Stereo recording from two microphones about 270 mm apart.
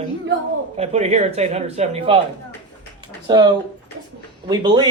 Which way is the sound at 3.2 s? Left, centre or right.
Centre.